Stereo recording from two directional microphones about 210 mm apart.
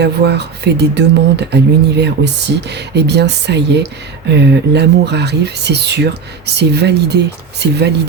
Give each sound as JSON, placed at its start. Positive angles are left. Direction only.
{"t": 0.0, "sound": "speech", "side_deg": -55}